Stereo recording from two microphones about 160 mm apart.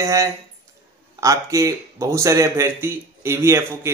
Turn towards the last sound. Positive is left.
turn(degrees=-15)  # may be behind; listen again after turning